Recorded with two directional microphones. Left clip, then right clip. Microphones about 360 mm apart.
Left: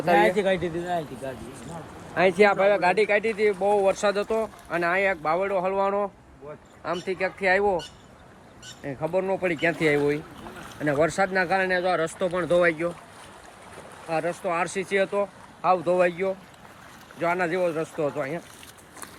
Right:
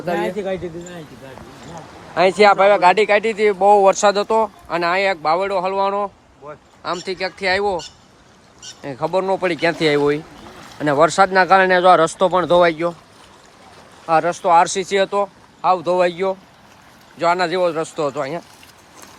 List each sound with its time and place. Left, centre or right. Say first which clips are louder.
0.1 s speech: left 2 dB; left
2.1 s speech: right 7 dB; centre
8.8 s speech: right 7 dB; centre
14.3 s speech: right 15 dB; centre